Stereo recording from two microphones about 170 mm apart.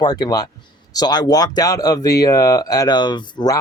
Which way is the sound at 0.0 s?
25° left (ahead or behind).